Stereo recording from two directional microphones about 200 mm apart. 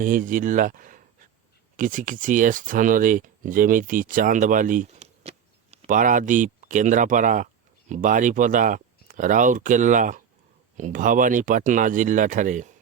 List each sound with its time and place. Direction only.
0.0 s speech: 40° right (ahead or behind)